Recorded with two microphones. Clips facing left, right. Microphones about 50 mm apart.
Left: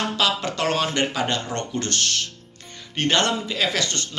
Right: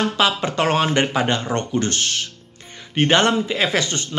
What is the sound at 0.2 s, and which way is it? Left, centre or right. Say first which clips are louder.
Speech: right 3 dB; right.